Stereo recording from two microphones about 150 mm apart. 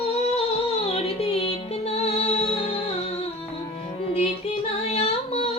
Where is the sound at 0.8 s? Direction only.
40° left (ahead or behind).